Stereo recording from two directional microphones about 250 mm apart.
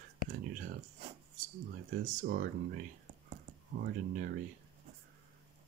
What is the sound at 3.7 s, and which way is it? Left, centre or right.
Speech, right.